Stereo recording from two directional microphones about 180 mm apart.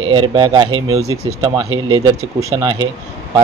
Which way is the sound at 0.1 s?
25° right (ahead or behind).